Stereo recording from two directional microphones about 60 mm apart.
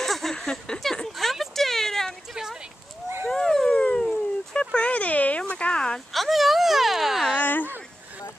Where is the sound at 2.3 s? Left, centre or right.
Centre.